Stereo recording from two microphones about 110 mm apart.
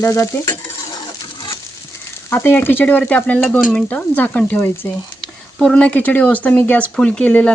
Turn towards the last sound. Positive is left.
turn(degrees=10)  # may be behind; listen again after turning